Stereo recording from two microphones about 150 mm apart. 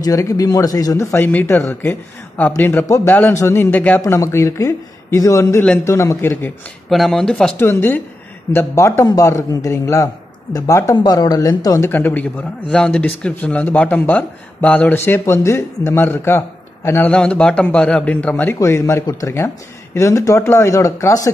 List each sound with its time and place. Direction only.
0.0 s speech: 25° left (ahead or behind)
6.9 s speech: centre (ahead or behind)
7.5 s speech: 15° left (ahead or behind)
11.9 s speech: 10° left (ahead or behind)